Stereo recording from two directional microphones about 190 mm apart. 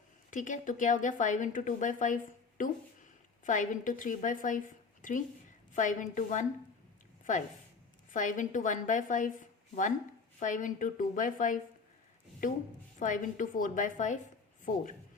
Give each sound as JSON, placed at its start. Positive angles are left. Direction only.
{"t": 0.3, "sound": "a woman's voice", "side_deg": 40}
{"t": 8.1, "sound": "a woman's voice", "side_deg": 45}